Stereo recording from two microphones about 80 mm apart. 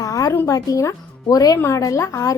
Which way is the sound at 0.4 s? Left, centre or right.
Left.